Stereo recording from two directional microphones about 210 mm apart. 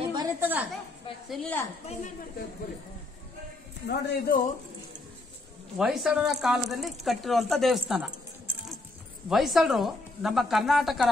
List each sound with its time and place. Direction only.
0.0 s a sound: 20° right (ahead or behind)
1.3 s speech: 5° left (ahead or behind)
3.8 s a man's voice: 50° left (ahead or behind)
5.8 s speech: 5° right (ahead or behind)